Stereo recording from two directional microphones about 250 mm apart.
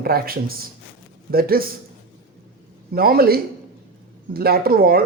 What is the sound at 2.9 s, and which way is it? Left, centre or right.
A woman's voice, right.